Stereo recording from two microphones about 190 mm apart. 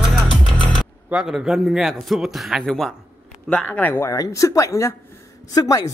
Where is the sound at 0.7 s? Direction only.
Centre (ahead or behind).